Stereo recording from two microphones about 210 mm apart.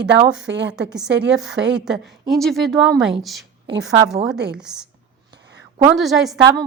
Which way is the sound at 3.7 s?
20° right (ahead or behind).